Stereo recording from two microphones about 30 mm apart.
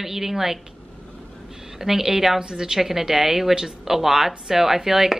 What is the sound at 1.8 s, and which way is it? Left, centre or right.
Speech, centre.